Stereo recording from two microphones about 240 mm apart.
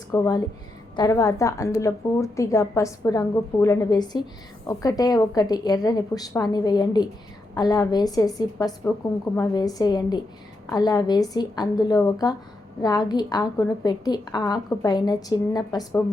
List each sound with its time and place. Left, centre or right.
0.1 s a woman's voice: centre